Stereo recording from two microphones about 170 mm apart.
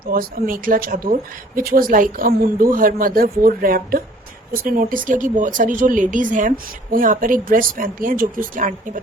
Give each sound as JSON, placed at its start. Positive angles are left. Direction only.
{"t": 0.0, "sound": "speech", "side_deg": -60}